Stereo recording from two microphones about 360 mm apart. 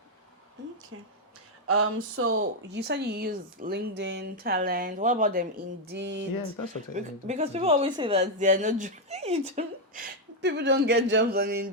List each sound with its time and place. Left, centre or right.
1.6 s a woman's voice: right
6.9 s a woman's voice: centre